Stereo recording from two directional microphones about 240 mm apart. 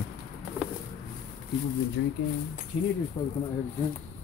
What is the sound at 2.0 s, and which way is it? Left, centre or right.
Speech, left.